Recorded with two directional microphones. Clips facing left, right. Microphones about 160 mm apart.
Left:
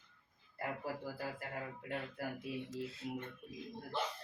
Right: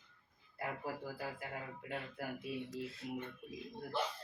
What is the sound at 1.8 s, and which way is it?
Speech, centre (ahead or behind).